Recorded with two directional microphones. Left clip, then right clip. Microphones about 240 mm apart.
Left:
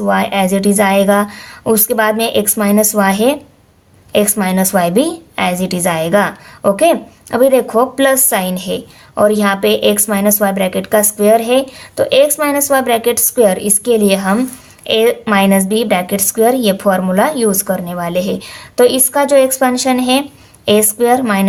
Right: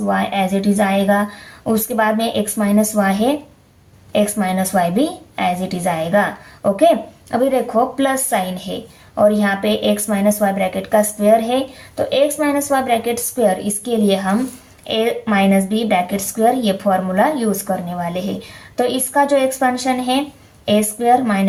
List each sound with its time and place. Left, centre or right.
0.0 s a woman's voice: left